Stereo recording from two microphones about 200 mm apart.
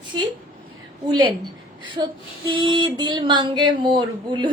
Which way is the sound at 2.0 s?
25° right (ahead or behind).